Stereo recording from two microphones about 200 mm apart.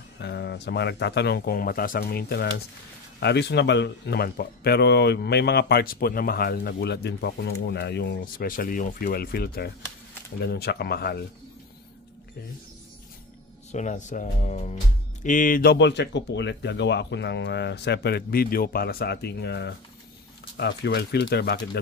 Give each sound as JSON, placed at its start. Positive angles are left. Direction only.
{"t": 0.2, "sound": "speech", "side_deg": 55}
{"t": 13.7, "sound": "speech", "side_deg": 35}